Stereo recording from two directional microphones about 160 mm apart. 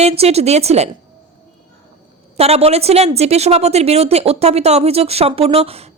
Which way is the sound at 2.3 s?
40° right (ahead or behind).